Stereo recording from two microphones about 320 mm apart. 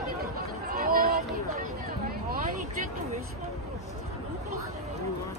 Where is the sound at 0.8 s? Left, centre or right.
Right.